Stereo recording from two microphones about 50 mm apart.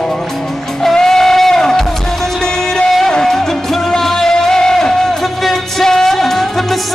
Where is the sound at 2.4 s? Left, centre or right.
Centre.